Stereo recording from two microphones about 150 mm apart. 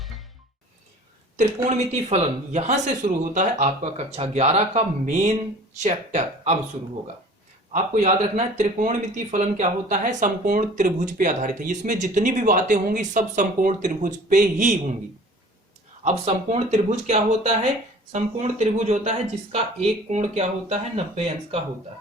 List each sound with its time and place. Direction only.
0.0 s music: centre (ahead or behind)
1.6 s speech: 50° right (ahead or behind)
7.7 s speech: 55° right (ahead or behind)
16.0 s speech: 45° right (ahead or behind)